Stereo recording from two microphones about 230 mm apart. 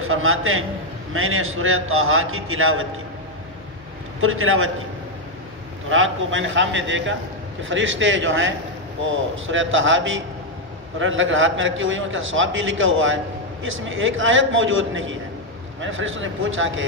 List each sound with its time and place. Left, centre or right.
0.0 s a man's voice: right
4.2 s a man's voice: right
5.9 s a man's voice: right